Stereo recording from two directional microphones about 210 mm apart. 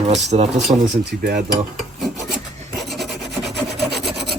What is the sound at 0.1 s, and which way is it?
Speech, 30° right (ahead or behind).